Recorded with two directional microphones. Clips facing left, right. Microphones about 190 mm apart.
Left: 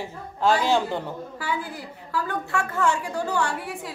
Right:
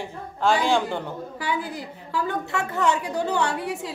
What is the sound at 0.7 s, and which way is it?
Speech, 5° left (ahead or behind).